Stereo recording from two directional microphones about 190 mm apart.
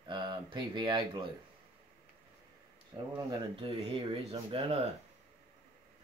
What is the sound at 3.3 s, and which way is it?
Speech, 30° right (ahead or behind).